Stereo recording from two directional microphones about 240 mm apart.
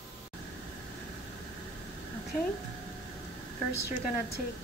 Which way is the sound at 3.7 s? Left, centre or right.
Left.